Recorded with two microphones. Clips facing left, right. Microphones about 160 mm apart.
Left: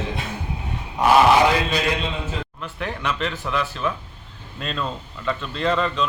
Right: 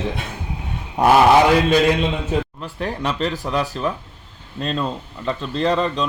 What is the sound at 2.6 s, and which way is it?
Speech, 35° right (ahead or behind).